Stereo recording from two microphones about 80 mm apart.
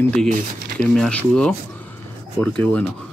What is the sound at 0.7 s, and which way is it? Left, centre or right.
Speech, centre.